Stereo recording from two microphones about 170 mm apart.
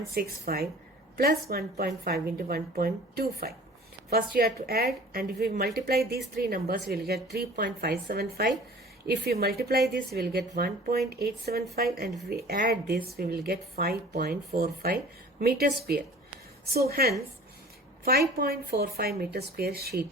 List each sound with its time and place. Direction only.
0.1 s a woman's voice: 60° right (ahead or behind)
16.7 s a woman's voice: 65° right (ahead or behind)